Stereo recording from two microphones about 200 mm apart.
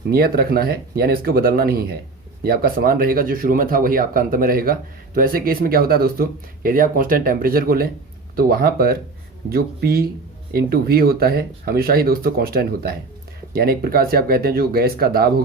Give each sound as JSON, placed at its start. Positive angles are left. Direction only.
{"t": 0.1, "sound": "speech", "side_deg": -50}